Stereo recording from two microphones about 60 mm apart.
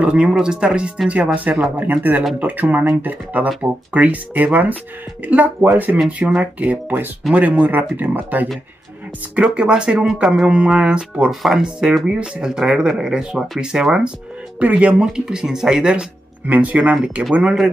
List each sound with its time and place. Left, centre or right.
0.0 s speech: centre
9.3 s speech: centre
11.2 s speech: centre
12.1 s speech: centre
14.6 s speech: right
16.4 s speech: right
17.2 s speech: centre